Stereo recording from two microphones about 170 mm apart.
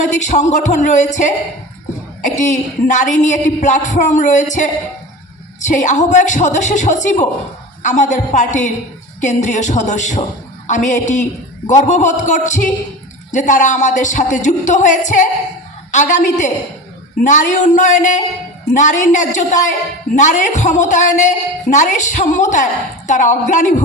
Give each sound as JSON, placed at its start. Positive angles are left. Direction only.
{"t": 0.0, "sound": "a woman's voice", "side_deg": 45}